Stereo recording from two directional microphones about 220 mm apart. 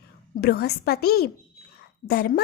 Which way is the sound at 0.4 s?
45° left (ahead or behind).